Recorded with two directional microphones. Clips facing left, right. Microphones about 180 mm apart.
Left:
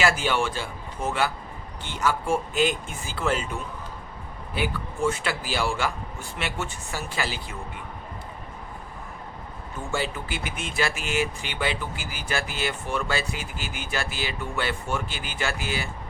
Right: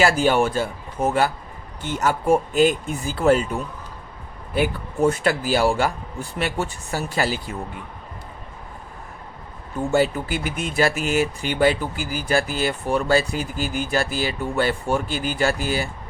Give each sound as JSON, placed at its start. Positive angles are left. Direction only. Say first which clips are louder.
{"t": 0.0, "sound": "speech", "louder": "right 6 dB", "side_deg": -40}
{"t": 9.9, "sound": "speech", "louder": "right 9 dB", "side_deg": -45}